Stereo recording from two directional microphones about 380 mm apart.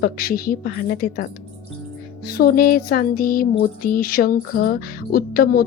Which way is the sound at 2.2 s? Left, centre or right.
Left.